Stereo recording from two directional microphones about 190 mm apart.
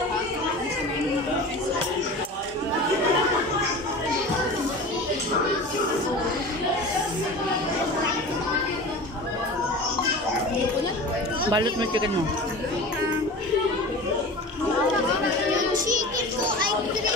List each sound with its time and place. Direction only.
11.4 s speech: 25° right (ahead or behind)